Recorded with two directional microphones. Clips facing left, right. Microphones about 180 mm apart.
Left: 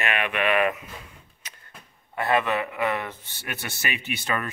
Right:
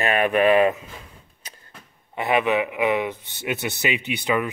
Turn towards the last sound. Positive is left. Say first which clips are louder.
# right 6 dB
turn(degrees=-15)  # may be behind; listen again after turning